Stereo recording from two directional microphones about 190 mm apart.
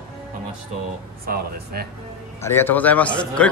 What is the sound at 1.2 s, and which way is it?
Speech, 50° right (ahead or behind).